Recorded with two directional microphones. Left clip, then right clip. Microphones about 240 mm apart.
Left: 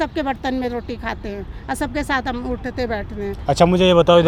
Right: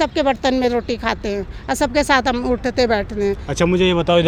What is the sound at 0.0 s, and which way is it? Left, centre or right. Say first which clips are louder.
Speech: right 5 dB; right.